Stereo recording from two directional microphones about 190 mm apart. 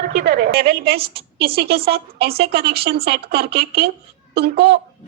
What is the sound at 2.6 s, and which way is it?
A woman's voice, 55° right (ahead or behind).